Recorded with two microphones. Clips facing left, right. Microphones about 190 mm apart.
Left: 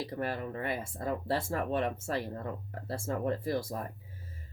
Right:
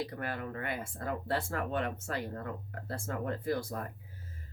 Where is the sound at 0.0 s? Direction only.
25° left (ahead or behind).